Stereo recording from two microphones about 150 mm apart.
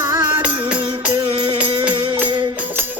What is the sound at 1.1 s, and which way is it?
Music, 30° right (ahead or behind).